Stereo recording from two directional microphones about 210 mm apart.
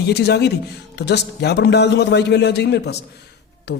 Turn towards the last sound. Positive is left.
turn(degrees=55)  # may be behind; listen again after turning